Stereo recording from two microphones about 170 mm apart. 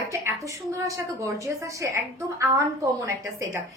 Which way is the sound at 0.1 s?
20° right (ahead or behind).